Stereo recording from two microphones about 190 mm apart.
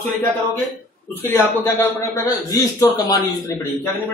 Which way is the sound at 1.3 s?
15° left (ahead or behind).